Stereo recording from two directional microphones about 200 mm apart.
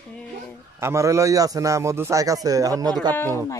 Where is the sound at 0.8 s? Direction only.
15° right (ahead or behind).